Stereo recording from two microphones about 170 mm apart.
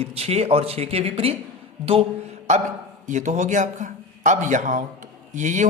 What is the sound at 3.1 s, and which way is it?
A man's voice, 45° right (ahead or behind).